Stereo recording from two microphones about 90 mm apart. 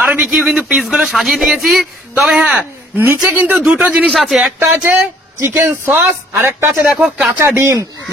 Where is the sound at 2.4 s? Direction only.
20° right (ahead or behind).